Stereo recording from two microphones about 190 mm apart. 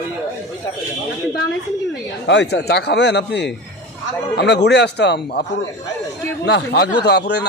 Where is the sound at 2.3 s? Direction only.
65° left (ahead or behind).